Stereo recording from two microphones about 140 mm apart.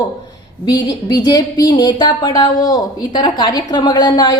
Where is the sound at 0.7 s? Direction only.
30° left (ahead or behind).